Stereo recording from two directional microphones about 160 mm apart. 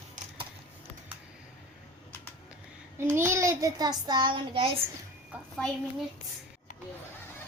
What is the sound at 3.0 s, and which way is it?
A child's voice, 15° right (ahead or behind).